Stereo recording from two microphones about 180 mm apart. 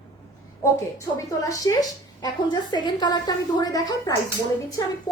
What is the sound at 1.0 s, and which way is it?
A woman's voice, 20° left (ahead or behind).